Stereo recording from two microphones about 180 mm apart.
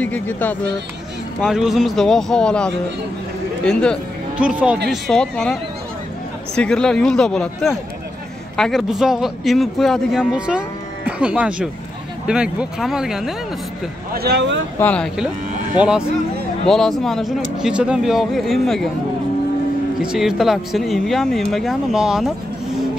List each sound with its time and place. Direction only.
0.0 s speech: 10° left (ahead or behind)
1.4 s speech: 5° right (ahead or behind)
4.4 s speech: 5° right (ahead or behind)
14.1 s speech: 65° right (ahead or behind)
14.8 s speech: 10° left (ahead or behind)
15.8 s speech: 5° right (ahead or behind)
20.0 s speech: 5° right (ahead or behind)